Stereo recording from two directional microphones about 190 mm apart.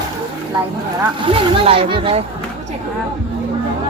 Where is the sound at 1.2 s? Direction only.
30° right (ahead or behind).